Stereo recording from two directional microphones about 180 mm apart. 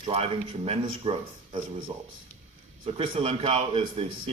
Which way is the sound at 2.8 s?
30° right (ahead or behind).